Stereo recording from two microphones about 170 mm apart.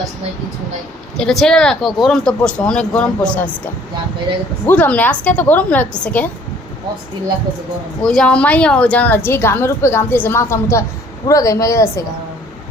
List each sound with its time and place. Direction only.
1.1 s speech: centre (ahead or behind)
4.6 s a woman's voice: 10° left (ahead or behind)
8.0 s a woman's voice: 5° left (ahead or behind)